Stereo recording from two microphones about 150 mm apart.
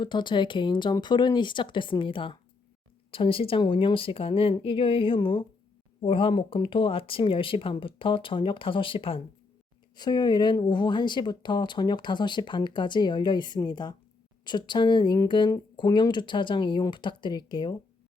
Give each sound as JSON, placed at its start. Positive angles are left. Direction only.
{"t": 0.0, "sound": "speech", "side_deg": 30}